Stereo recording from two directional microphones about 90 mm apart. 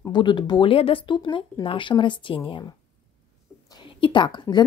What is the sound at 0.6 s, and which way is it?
Speech, 90° left.